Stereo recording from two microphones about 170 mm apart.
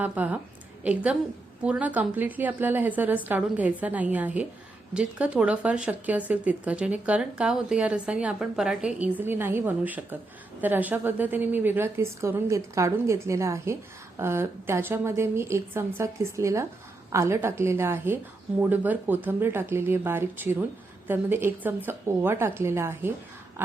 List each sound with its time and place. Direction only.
0.0 s speech: 10° right (ahead or behind)
1.6 s speech: 10° right (ahead or behind)